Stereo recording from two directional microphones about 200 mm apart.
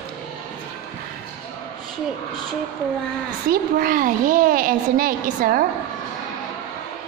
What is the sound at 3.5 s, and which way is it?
A child's voice, 45° right (ahead or behind).